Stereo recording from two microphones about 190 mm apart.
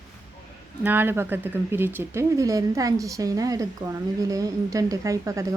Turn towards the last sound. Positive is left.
turn(degrees=-15)  # may be behind; listen again after turning